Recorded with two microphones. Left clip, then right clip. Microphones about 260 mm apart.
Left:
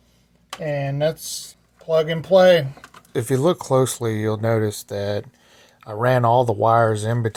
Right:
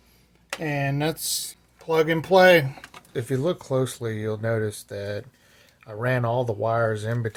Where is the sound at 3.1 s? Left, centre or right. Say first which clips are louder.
Left 6 dB; left.